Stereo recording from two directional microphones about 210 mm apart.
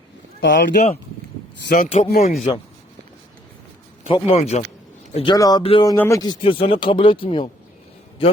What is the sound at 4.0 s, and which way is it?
Speech, 30° left (ahead or behind).